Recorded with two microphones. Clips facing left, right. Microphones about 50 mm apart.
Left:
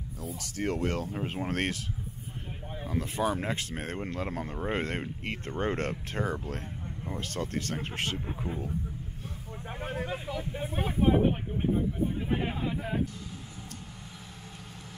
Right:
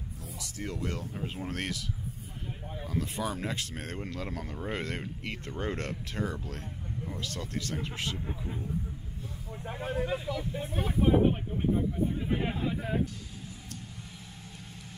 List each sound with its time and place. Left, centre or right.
0.4 s speech: left
1.1 s speech: left
2.9 s speech: left
9.6 s speech: centre